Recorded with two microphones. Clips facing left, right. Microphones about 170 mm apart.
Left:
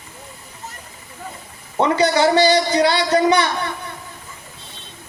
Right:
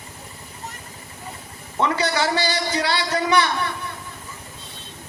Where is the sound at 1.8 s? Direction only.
20° left (ahead or behind).